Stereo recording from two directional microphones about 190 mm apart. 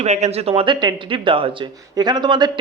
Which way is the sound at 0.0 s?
35° right (ahead or behind).